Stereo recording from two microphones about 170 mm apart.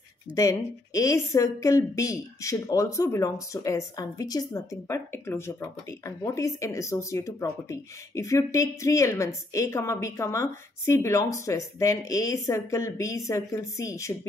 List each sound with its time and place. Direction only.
0.3 s a woman's voice: 20° left (ahead or behind)